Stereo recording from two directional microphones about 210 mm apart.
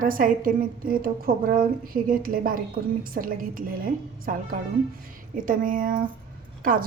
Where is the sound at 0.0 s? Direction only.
40° right (ahead or behind).